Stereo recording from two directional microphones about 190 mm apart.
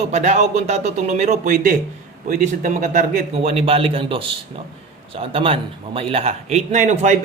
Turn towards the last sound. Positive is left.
turn(degrees=-40)  # may be behind; listen again after turning